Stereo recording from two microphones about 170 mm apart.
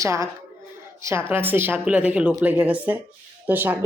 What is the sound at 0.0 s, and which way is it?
Speech, 15° right (ahead or behind).